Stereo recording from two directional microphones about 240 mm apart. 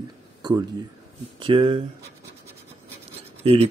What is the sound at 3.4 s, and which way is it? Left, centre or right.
Speech, right.